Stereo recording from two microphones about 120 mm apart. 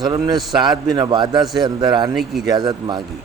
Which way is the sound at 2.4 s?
30° right (ahead or behind).